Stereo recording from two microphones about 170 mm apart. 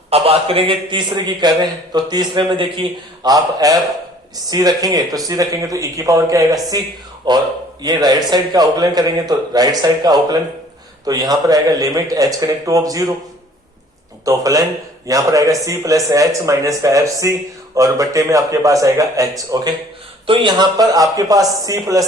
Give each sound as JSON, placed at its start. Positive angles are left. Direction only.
{"t": 0.1, "sound": "speech", "side_deg": -35}
{"t": 14.3, "sound": "speech", "side_deg": -20}